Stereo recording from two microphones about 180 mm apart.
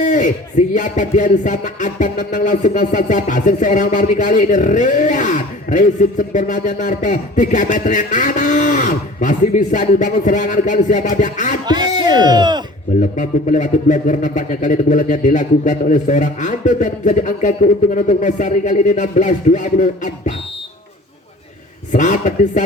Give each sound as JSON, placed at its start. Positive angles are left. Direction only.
{"t": 0.0, "sound": "speech", "side_deg": 45}
{"t": 11.6, "sound": "speech", "side_deg": -25}
{"t": 13.0, "sound": "speech", "side_deg": 45}
{"t": 21.9, "sound": "speech", "side_deg": 45}